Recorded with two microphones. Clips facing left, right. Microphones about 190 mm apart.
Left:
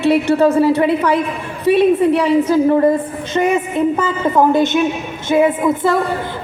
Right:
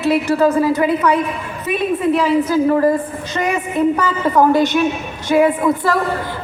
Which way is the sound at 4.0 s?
20° left (ahead or behind).